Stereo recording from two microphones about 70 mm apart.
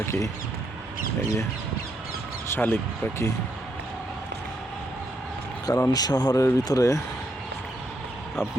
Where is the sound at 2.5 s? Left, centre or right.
Left.